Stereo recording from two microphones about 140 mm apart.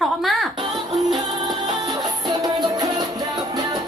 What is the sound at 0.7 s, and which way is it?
Music, centre (ahead or behind).